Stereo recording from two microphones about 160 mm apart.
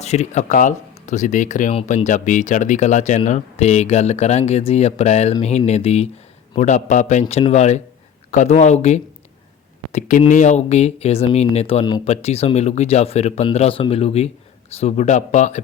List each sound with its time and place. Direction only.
0.0 s speech: 45° left (ahead or behind)
12.0 s speech: 40° left (ahead or behind)